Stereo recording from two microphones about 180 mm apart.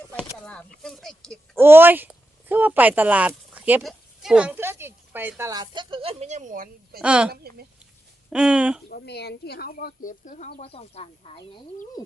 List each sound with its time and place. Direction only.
0.8 s speech: centre (ahead or behind)
1.5 s speech: 10° right (ahead or behind); by 7.0 s 50° right (ahead or behind)
7.0 s a woman's voice: 5° right (ahead or behind)
7.3 s speech: 60° right (ahead or behind)
8.3 s speech: 5° right (ahead or behind)
8.9 s speech: 65° left (ahead or behind); by 11.6 s 30° left (ahead or behind)